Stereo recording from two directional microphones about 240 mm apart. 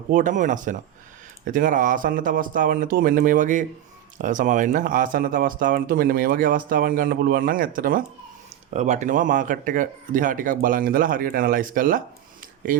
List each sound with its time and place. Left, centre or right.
0.1 s speech: right